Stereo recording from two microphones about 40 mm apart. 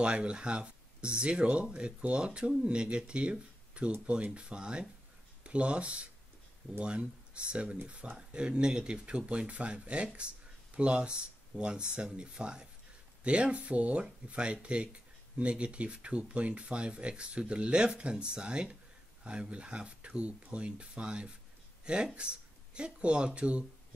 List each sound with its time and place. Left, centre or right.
0.0 s speech: right